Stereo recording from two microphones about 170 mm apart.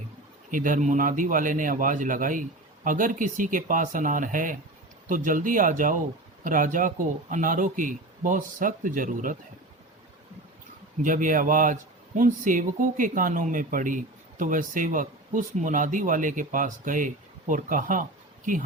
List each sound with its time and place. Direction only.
0.5 s speech: 50° right (ahead or behind)
11.0 s speech: 50° right (ahead or behind)